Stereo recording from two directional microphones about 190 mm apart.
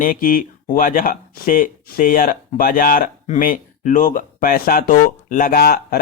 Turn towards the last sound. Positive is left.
turn(degrees=55)  # may be behind; listen again after turning